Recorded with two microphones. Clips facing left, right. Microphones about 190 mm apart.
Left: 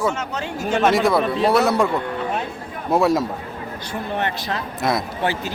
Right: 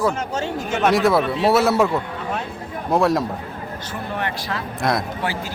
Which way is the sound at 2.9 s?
Centre (ahead or behind).